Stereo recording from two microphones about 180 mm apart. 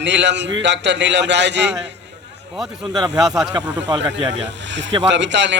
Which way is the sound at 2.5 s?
Centre (ahead or behind).